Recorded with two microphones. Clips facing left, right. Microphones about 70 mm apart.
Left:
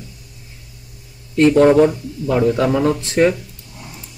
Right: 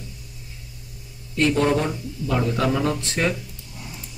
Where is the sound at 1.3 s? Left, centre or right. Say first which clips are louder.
Left 9 dB; left.